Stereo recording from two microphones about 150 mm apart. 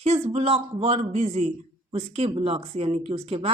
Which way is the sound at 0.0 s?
45° right (ahead or behind).